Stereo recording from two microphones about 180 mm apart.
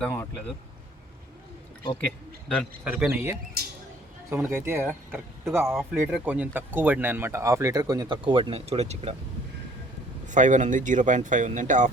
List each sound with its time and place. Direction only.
0.0 s speech: 15° left (ahead or behind)
2.5 s a man's voice: centre (ahead or behind)
2.9 s speech: 10° right (ahead or behind)
3.6 s a sound: 60° right (ahead or behind)
4.3 s speech: 15° right (ahead or behind); by 9.1 s 35° right (ahead or behind)
10.2 s speech: 45° right (ahead or behind)